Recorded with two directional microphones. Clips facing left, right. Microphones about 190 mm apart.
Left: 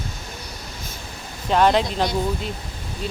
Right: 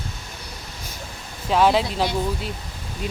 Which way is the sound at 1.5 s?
5° right (ahead or behind).